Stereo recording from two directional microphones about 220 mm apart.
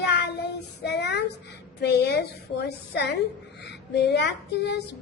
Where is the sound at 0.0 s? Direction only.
50° left (ahead or behind).